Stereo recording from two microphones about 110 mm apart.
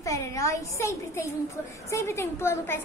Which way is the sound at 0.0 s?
30° left (ahead or behind).